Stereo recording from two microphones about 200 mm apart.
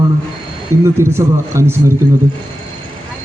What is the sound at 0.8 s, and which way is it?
Speech, 15° right (ahead or behind).